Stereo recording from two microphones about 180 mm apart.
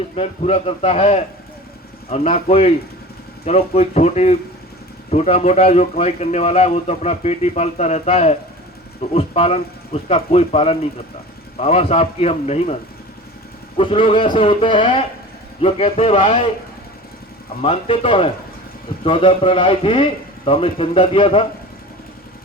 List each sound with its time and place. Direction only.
0.2 s speech: 35° left (ahead or behind)
13.7 s a man's voice: 30° left (ahead or behind)
17.6 s speech: 30° left (ahead or behind)